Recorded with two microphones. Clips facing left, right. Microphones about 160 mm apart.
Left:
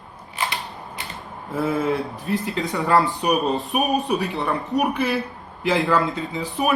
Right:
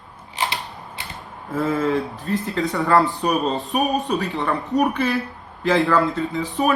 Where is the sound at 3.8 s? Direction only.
5° left (ahead or behind).